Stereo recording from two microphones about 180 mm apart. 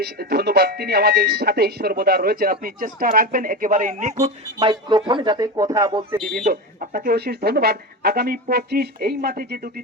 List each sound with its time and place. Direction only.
0.0 s speech: 60° right (ahead or behind); by 4.3 s 45° right (ahead or behind)
4.5 s speech: 25° right (ahead or behind)
6.4 s speech: 50° right (ahead or behind)